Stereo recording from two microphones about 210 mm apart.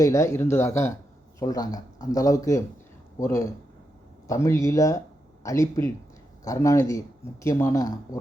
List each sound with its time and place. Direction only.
0.0 s speech: 15° left (ahead or behind)